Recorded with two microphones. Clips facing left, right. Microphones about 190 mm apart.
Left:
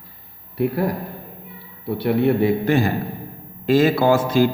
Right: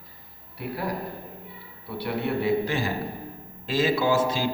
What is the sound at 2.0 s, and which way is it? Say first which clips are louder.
A man's voice: left 9 dB; 55° left (ahead or behind).